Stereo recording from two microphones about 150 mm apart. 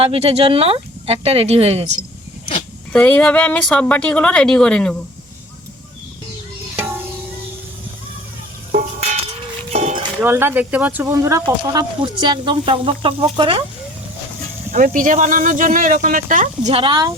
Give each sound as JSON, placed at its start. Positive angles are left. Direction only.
{"t": 0.0, "sound": "speech", "side_deg": -40}
{"t": 2.9, "sound": "speech", "side_deg": 10}
{"t": 9.7, "sound": "a sound", "side_deg": -50}
{"t": 10.2, "sound": "speech", "side_deg": -15}
{"t": 11.1, "sound": "speech", "side_deg": -20}
{"t": 14.7, "sound": "speech", "side_deg": -65}
{"t": 16.7, "sound": "speech", "side_deg": -30}